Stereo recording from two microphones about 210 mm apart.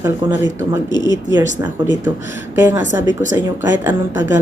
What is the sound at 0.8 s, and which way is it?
Speech, 20° left (ahead or behind).